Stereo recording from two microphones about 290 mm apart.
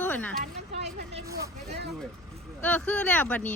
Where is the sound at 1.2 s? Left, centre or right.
Centre.